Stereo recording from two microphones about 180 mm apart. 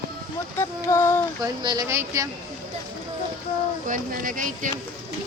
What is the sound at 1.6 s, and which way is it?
Speech, 20° right (ahead or behind).